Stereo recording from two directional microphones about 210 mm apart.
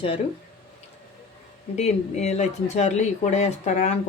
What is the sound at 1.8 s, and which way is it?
Speech, 30° left (ahead or behind).